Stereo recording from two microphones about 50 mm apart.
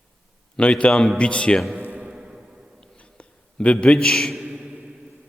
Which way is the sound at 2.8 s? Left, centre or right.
Left.